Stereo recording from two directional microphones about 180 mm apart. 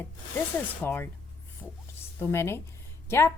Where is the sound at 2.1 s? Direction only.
15° left (ahead or behind).